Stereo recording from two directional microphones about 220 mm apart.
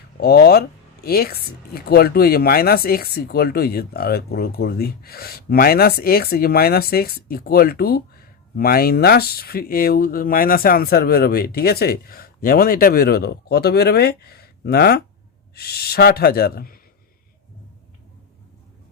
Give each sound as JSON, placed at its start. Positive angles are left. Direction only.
{"t": 0.2, "sound": "speech", "side_deg": 45}